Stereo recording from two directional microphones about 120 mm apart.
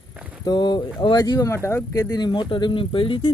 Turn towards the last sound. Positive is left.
turn(degrees=45)  # may be behind; listen again after turning